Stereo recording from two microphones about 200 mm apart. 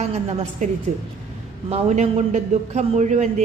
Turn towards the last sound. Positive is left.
turn(degrees=-35)  # may be behind; listen again after turning